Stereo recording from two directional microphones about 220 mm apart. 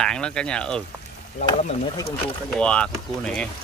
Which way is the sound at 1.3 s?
35° left (ahead or behind).